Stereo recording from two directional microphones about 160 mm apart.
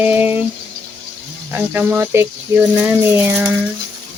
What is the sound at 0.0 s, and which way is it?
Speech, 10° right (ahead or behind).